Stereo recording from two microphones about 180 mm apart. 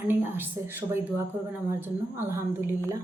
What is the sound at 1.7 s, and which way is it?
Speech, 10° right (ahead or behind).